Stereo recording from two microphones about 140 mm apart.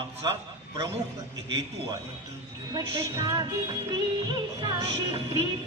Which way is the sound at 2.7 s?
30° right (ahead or behind).